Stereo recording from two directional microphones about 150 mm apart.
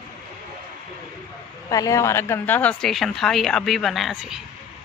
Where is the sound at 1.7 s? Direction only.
20° left (ahead or behind); by 4.4 s centre (ahead or behind).